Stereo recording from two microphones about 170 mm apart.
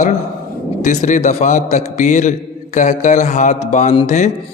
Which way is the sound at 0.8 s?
45° left (ahead or behind).